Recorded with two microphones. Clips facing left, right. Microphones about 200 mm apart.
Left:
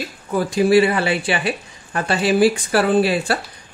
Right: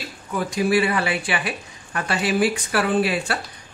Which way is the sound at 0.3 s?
30° left (ahead or behind).